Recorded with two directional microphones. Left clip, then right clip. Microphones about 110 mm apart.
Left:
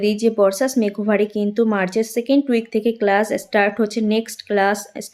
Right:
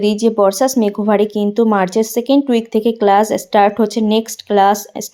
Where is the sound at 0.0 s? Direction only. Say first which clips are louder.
Right 3 dB; 30° right (ahead or behind).